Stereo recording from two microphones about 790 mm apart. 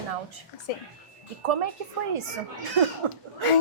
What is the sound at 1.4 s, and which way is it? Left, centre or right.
Speech, right.